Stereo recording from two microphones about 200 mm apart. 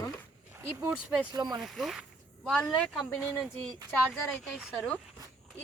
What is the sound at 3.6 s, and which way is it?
Speech, 20° right (ahead or behind).